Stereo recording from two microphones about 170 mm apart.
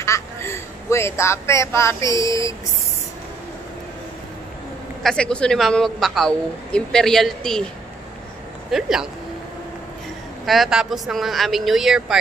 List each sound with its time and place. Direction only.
0.0 s a woman's voice: 15° left (ahead or behind)
5.0 s a man's voice: 5° left (ahead or behind)
8.7 s a man's voice: 5° right (ahead or behind)
10.4 s a man's voice: centre (ahead or behind)